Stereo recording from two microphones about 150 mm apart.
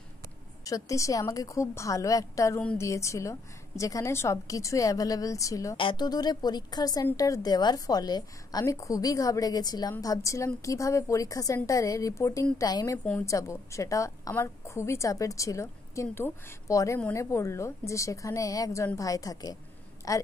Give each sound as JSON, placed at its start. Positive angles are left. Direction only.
{"t": 0.7, "sound": "a woman's voice", "side_deg": 20}
{"t": 5.8, "sound": "a woman's voice", "side_deg": 30}